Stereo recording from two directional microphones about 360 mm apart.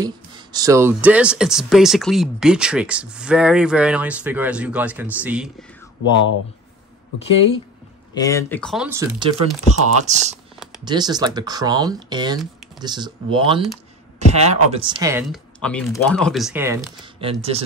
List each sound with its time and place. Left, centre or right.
0.0 s speech: centre
8.1 s speech: centre
9.7 s speech: centre